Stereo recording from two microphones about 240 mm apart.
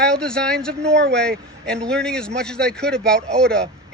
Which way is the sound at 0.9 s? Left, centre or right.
Right.